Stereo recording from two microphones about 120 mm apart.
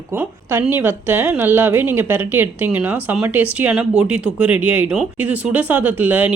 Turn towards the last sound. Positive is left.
turn(degrees=-15)  # may be behind; listen again after turning